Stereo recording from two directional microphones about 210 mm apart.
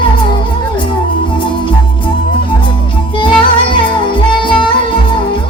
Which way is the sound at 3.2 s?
20° left (ahead or behind).